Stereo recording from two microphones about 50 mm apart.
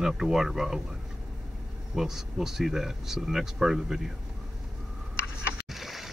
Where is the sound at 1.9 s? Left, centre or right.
Centre.